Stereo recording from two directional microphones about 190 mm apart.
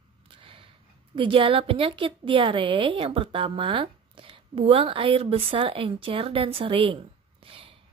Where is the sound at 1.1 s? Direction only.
25° right (ahead or behind).